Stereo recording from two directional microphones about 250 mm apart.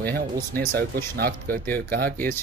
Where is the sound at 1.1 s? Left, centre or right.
Right.